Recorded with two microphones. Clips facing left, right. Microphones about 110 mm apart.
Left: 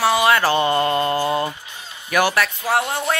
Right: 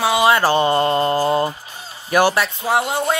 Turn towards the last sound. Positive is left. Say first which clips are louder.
# right 2 dB
turn(degrees=-15)  # may be behind; listen again after turning